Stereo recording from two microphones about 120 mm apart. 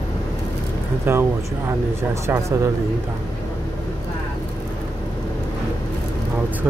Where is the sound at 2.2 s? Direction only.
25° right (ahead or behind).